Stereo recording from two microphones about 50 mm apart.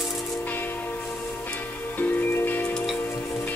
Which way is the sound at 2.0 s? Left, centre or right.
Left.